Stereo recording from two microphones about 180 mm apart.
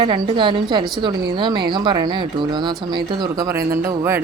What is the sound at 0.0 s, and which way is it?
A woman's voice, 25° right (ahead or behind).